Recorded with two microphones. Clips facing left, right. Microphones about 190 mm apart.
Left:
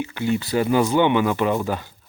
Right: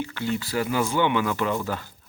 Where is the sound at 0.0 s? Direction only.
15° left (ahead or behind).